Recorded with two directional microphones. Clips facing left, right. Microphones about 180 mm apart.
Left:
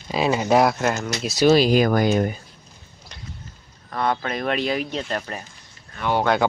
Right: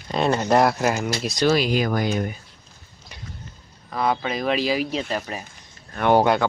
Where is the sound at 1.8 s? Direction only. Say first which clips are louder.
Left 4 dB; 55° left (ahead or behind).